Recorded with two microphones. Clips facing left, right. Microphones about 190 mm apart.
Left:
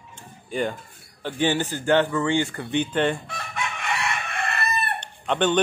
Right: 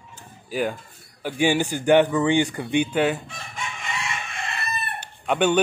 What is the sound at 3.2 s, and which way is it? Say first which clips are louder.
Chicken: left 4 dB; 65° left (ahead or behind).